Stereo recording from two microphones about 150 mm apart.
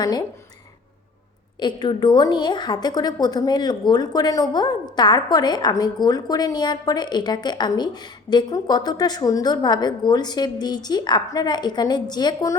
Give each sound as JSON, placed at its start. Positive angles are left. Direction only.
{"t": 0.0, "sound": "a woman's voice", "side_deg": 25}
{"t": 1.5, "sound": "a woman's voice", "side_deg": 30}